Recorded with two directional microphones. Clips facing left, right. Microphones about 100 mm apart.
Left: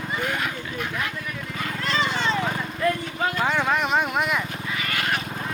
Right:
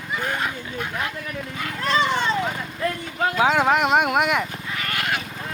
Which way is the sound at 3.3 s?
90° right.